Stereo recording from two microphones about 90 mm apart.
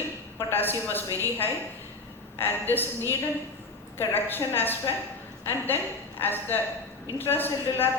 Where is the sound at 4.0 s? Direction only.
20° left (ahead or behind).